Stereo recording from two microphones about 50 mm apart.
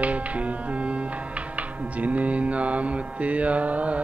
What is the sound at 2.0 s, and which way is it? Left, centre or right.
Music, right.